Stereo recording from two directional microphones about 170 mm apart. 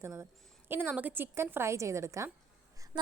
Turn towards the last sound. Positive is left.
turn(degrees=-25)  # may be behind; listen again after turning